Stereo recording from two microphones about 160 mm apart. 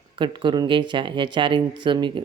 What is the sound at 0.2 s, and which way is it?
Speech, 30° right (ahead or behind).